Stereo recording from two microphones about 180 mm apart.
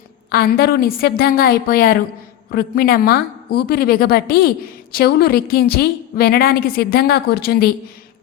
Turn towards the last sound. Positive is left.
turn(degrees=60)  # may be behind; listen again after turning